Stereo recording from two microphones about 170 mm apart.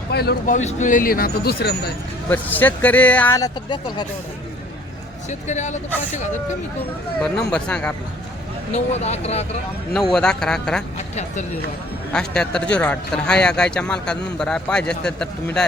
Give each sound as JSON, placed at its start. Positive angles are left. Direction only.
{"t": 0.1, "sound": "speech", "side_deg": 70}
{"t": 0.4, "sound": "speech", "side_deg": 45}
{"t": 2.3, "sound": "speech", "side_deg": 10}
{"t": 5.3, "sound": "speech", "side_deg": 45}
{"t": 7.5, "sound": "speech", "side_deg": 5}
{"t": 8.7, "sound": "speech", "side_deg": 40}
{"t": 9.9, "sound": "a man's voice", "side_deg": 0}
{"t": 10.9, "sound": "speech", "side_deg": 40}
{"t": 12.1, "sound": "a man's voice", "side_deg": 5}